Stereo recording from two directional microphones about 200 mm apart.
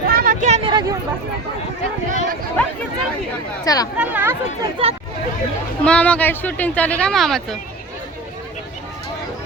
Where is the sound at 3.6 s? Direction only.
20° left (ahead or behind).